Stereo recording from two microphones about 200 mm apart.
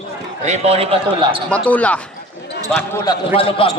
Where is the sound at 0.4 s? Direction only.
35° right (ahead or behind).